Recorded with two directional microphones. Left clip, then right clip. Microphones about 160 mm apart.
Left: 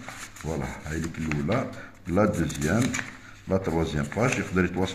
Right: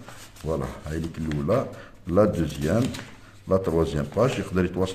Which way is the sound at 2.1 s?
30° right (ahead or behind).